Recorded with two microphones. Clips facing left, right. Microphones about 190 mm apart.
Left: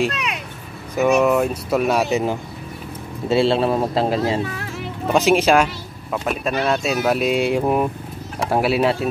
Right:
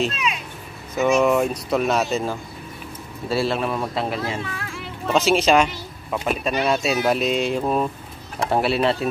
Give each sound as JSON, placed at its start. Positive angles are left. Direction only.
{"t": 0.1, "sound": "vehicle", "side_deg": 65}
{"t": 1.2, "sound": "speech", "side_deg": 5}
{"t": 3.3, "sound": "speech", "side_deg": 25}
{"t": 5.0, "sound": "speech", "side_deg": 15}